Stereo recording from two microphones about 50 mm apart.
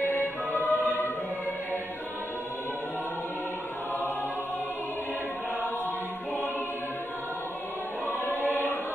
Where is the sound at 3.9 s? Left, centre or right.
Left.